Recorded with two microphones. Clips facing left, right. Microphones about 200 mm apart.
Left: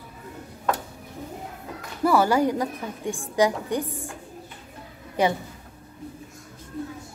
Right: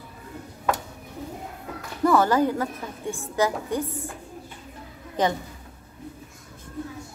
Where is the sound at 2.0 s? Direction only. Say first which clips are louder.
Even; 10° left (ahead or behind).